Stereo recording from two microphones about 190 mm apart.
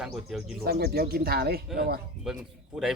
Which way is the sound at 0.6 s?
55° right (ahead or behind).